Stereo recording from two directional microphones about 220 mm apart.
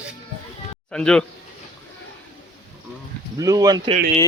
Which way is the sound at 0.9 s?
5° left (ahead or behind).